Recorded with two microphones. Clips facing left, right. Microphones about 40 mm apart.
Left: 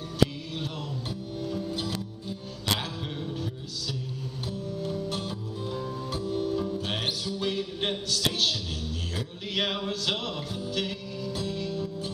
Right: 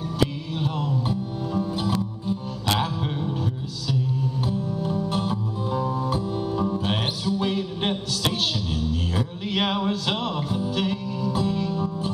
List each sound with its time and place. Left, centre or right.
0.2 s music: centre
4.5 s music: centre